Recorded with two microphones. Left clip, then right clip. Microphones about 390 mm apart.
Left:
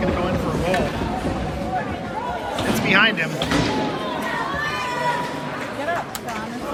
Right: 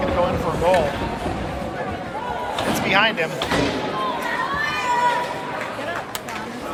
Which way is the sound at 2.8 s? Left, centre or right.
Centre.